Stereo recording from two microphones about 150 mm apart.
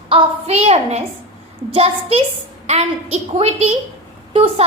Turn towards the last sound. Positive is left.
turn(degrees=-40)  # may be behind; listen again after turning